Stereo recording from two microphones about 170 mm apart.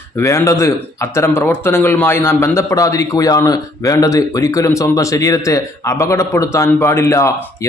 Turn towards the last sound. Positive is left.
turn(degrees=15)  # may be behind; listen again after turning